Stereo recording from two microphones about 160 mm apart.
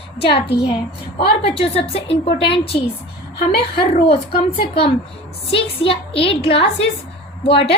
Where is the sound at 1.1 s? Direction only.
35° left (ahead or behind).